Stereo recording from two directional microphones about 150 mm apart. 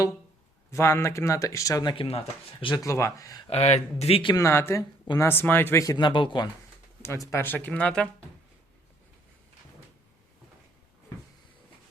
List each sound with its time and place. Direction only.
0.7 s speech: 15° left (ahead or behind); by 2.8 s 35° left (ahead or behind)
2.8 s speech: 20° left (ahead or behind)
3.5 s speech: 45° left (ahead or behind)
4.4 s speech: 15° left (ahead or behind)
7.3 s speech: 15° left (ahead or behind)